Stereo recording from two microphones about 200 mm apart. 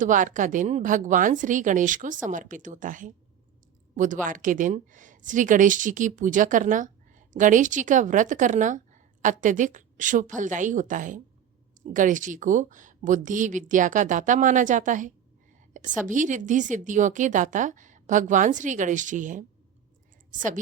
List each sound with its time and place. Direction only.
0.0 s a woman's voice: 40° right (ahead or behind)